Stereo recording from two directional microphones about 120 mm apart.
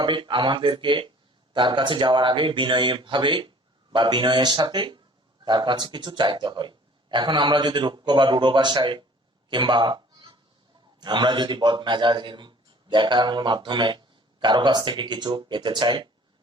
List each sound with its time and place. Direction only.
0.0 s a man's voice: 45° right (ahead or behind)
9.5 s meow: 40° right (ahead or behind)
11.0 s a man's voice: 40° right (ahead or behind)